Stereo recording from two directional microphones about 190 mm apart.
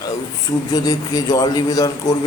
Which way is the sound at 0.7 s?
20° left (ahead or behind).